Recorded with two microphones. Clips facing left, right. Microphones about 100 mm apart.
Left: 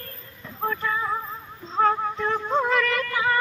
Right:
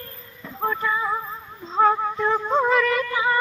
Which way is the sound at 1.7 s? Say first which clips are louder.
Right 3 dB; 10° right (ahead or behind).